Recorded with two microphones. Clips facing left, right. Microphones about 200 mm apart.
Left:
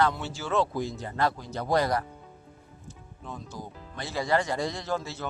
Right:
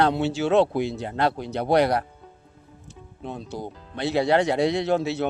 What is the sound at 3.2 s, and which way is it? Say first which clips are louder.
Speech: right 7 dB; 70° right (ahead or behind).